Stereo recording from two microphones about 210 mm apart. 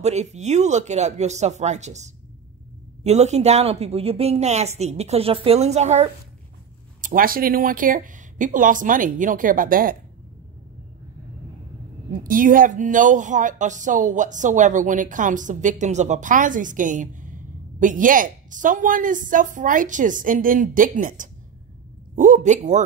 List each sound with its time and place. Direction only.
0.0 s speech: 30° right (ahead or behind)
12.1 s speech: 40° right (ahead or behind)